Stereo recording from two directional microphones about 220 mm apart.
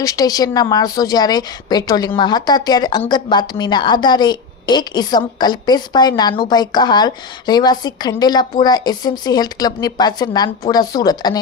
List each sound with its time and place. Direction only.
0.0 s a woman's voice: 15° left (ahead or behind)